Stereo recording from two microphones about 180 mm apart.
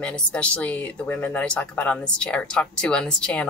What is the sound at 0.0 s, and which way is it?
Speech, 5° left (ahead or behind).